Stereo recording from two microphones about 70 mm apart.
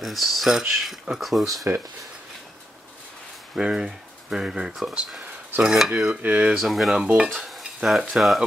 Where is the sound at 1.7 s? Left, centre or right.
Right.